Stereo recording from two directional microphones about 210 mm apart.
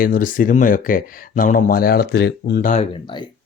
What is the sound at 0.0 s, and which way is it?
Speech, 40° left (ahead or behind).